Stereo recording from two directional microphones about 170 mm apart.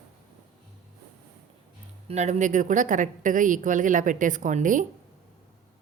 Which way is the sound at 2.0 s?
45° right (ahead or behind).